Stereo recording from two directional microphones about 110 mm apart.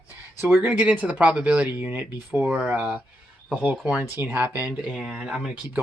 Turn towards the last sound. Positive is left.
turn(degrees=-10)  # may be behind; listen again after turning